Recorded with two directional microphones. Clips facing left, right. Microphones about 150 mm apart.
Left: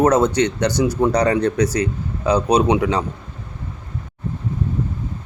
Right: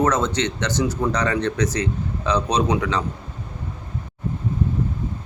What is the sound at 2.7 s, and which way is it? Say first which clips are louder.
Speech: left 4 dB; 30° left (ahead or behind).